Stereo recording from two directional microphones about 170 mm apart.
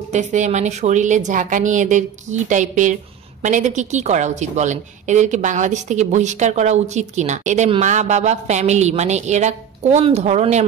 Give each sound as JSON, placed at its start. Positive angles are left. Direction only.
{"t": 0.1, "sound": "a woman's voice", "side_deg": -45}